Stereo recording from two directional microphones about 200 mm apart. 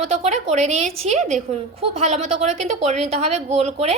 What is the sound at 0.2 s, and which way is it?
A woman's voice, 35° right (ahead or behind).